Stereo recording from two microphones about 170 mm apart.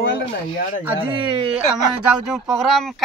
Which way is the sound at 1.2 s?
30° right (ahead or behind).